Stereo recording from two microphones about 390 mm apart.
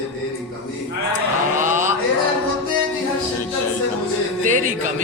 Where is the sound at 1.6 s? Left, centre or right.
Centre.